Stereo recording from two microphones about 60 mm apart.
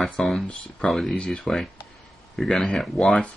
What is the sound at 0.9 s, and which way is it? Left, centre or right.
Speech, centre.